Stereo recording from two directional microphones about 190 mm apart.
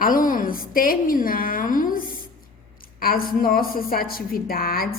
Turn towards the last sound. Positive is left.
turn(degrees=50)  # may be behind; listen again after turning